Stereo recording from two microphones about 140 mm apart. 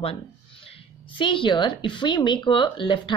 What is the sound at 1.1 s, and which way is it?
Speech, 35° left (ahead or behind).